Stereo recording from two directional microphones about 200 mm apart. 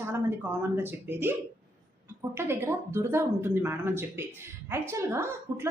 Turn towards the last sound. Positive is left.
turn(degrees=-10)  # may be behind; listen again after turning